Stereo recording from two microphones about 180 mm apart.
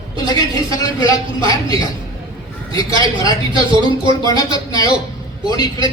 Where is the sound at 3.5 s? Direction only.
25° right (ahead or behind).